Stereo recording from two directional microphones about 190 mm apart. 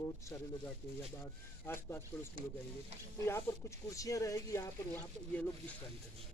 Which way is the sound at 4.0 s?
15° left (ahead or behind).